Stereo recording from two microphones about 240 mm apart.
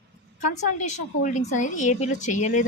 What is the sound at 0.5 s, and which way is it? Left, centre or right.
A woman's voice, left.